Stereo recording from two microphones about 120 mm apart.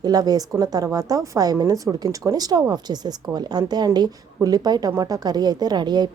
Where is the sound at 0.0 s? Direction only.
35° right (ahead or behind).